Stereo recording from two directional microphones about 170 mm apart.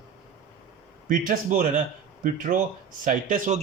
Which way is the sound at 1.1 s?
50° right (ahead or behind).